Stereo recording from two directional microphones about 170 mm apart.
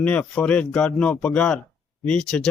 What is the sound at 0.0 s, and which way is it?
Speech, 5° left (ahead or behind).